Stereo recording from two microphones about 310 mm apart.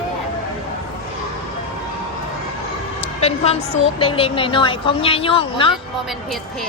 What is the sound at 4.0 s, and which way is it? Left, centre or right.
A woman's voice, centre.